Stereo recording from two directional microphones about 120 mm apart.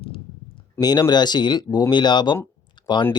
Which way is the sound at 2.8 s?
40° left (ahead or behind).